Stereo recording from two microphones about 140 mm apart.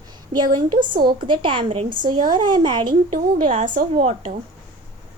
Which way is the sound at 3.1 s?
45° right (ahead or behind).